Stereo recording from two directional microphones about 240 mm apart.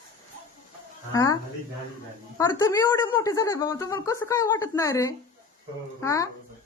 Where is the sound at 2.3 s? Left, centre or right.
Centre.